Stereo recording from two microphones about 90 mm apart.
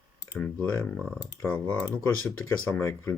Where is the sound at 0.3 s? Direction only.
15° left (ahead or behind).